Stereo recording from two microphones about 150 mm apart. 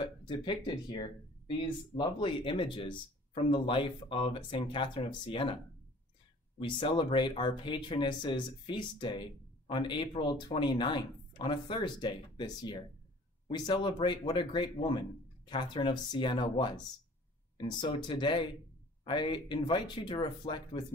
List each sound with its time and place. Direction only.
0.0 s speech: 30° left (ahead or behind)
6.6 s speech: 30° left (ahead or behind)